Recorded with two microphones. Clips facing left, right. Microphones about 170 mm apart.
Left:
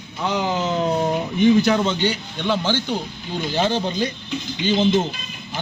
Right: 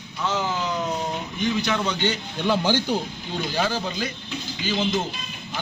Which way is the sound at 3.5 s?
25° left (ahead or behind).